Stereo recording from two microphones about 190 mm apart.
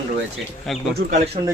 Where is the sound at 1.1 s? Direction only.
40° right (ahead or behind).